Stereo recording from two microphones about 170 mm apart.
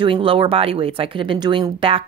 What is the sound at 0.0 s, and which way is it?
Speech, 30° right (ahead or behind).